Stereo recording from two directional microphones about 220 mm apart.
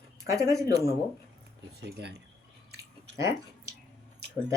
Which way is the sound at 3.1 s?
15° right (ahead or behind).